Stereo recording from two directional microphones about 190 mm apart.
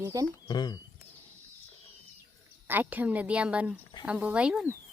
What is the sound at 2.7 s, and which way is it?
A woman's voice, 10° right (ahead or behind).